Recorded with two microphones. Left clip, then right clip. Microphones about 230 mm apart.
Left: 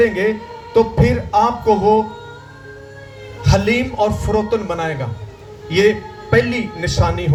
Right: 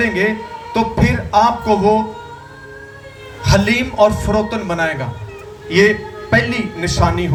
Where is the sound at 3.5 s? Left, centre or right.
Right.